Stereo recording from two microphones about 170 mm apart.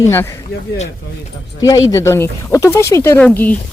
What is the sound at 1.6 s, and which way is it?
Speech, 20° left (ahead or behind).